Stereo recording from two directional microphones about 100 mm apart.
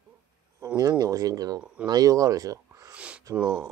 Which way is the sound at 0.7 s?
40° right (ahead or behind).